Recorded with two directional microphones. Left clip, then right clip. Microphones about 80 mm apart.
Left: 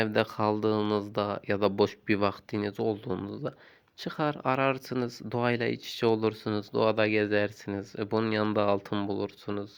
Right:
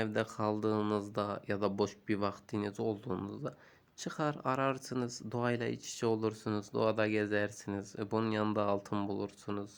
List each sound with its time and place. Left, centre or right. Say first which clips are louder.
0.0 s speech: left 7 dB; left
2.5 s speech: left 6 dB; left